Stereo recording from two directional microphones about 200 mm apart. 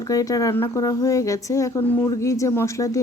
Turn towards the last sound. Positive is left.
turn(degrees=15)  # may be behind; listen again after turning